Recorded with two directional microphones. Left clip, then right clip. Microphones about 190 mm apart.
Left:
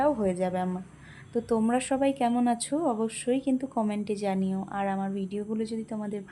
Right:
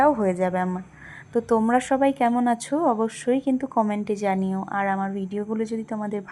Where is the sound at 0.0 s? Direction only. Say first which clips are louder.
Right 6 dB; 15° right (ahead or behind).